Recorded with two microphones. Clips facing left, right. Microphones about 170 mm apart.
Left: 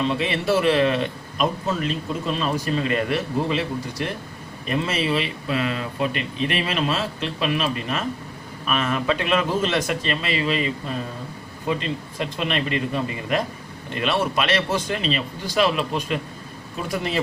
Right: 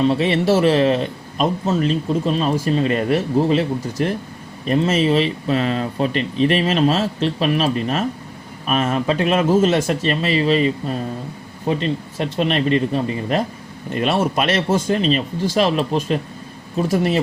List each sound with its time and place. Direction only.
0.1 s a man's voice: 40° right (ahead or behind)